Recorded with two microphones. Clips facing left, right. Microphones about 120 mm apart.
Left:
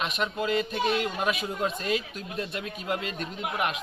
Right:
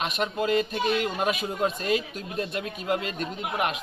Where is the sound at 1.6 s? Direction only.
45° right (ahead or behind).